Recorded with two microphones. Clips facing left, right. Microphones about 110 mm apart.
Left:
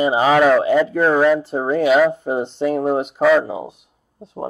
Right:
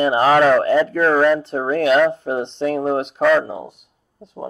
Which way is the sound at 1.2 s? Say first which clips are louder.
Left 1 dB; 5° left (ahead or behind).